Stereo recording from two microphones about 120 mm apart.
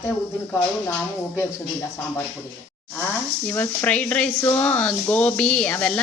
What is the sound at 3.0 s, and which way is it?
Speech, 15° left (ahead or behind).